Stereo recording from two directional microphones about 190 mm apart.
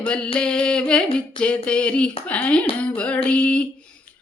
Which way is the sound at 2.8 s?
5° left (ahead or behind).